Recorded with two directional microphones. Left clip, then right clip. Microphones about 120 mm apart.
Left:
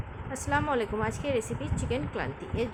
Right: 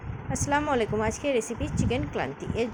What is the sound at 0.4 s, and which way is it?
Speech, 20° right (ahead or behind).